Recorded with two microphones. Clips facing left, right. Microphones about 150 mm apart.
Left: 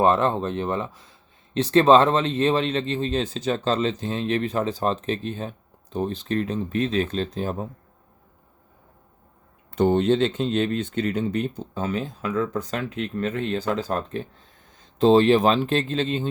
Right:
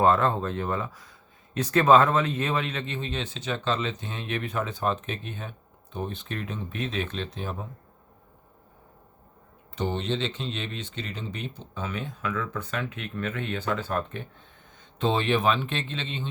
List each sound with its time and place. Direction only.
0.0 s speech: 20° left (ahead or behind); by 7.7 s 40° left (ahead or behind)
9.7 s speech: 50° left (ahead or behind)